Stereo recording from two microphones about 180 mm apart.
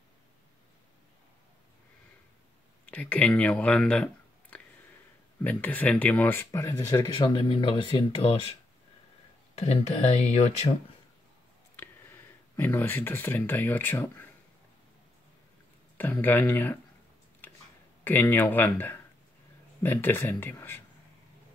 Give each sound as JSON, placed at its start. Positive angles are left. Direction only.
{"t": 2.9, "sound": "speech", "side_deg": 10}
{"t": 7.2, "sound": "speech", "side_deg": 25}
{"t": 9.6, "sound": "speech", "side_deg": 35}
{"t": 11.7, "sound": "speech", "side_deg": 10}
{"t": 16.0, "sound": "speech", "side_deg": 10}
{"t": 17.4, "sound": "a sound", "side_deg": 10}
{"t": 18.0, "sound": "speech", "side_deg": 10}